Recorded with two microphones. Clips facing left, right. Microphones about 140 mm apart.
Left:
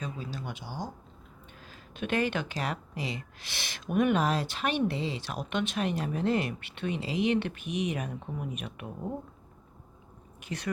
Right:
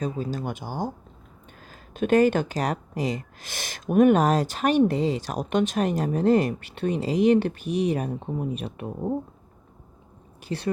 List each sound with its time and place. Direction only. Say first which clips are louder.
0.0 s speech: right 9 dB; 45° right (ahead or behind)
10.4 s speech: right 6 dB; 30° right (ahead or behind)